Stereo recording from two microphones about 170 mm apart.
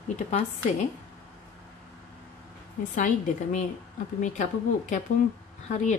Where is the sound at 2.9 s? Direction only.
45° left (ahead or behind).